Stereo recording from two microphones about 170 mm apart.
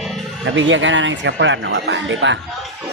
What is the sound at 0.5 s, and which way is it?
A man's voice, 90° right.